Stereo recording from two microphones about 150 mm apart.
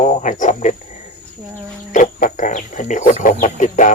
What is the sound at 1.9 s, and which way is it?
Didgeridoo, 60° left (ahead or behind).